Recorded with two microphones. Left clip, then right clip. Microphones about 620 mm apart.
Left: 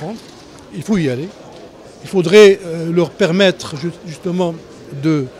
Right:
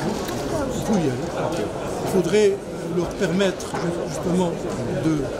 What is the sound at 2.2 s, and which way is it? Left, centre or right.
Speech, left.